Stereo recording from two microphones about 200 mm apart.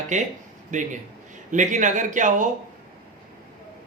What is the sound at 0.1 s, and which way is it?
A man's voice, 35° right (ahead or behind).